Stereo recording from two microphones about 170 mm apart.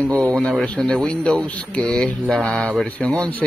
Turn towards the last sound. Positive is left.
turn(degrees=5)  # may be behind; listen again after turning